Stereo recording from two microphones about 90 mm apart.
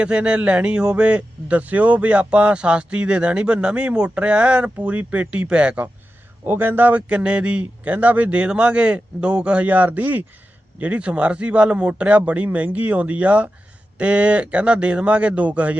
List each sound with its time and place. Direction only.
0.0 s speech: 10° right (ahead or behind)